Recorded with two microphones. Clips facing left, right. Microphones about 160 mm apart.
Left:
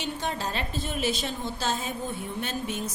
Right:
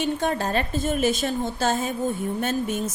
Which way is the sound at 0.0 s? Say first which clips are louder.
Right 7 dB; 50° right (ahead or behind).